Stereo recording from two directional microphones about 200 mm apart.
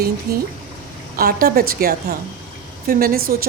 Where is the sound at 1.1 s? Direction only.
45° right (ahead or behind).